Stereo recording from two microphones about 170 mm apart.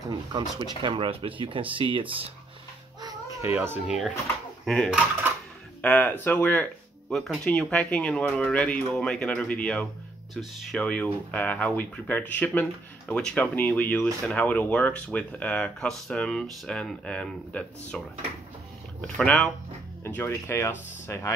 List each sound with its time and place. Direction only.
0.3 s speech: 25° right (ahead or behind)
3.0 s speech: 20° right (ahead or behind); by 19.5 s 5° left (ahead or behind)
20.0 s speech: 15° left (ahead or behind)